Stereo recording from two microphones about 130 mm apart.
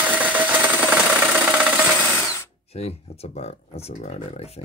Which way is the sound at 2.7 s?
50° left (ahead or behind).